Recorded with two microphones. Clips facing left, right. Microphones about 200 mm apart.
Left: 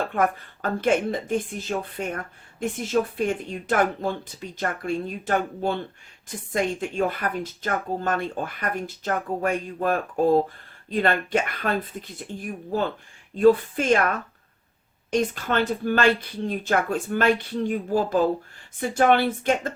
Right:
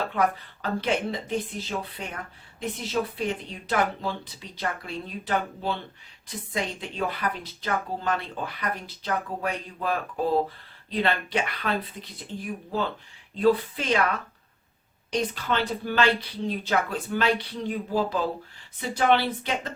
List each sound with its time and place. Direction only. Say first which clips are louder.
0.1 s speech: left 2 dB; 50° left (ahead or behind)